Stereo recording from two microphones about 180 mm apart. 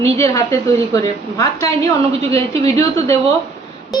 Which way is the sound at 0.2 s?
15° left (ahead or behind).